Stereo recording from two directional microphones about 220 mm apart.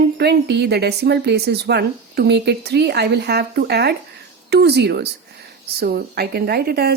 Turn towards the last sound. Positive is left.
turn(degrees=-45)  # may be behind; listen again after turning